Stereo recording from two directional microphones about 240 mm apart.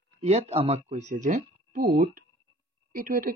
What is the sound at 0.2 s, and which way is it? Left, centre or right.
A woman's voice, right.